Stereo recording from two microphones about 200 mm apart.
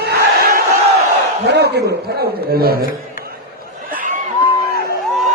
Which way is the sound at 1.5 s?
55° right (ahead or behind).